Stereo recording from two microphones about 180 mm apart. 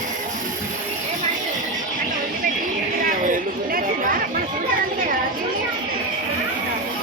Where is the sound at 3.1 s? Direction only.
50° right (ahead or behind).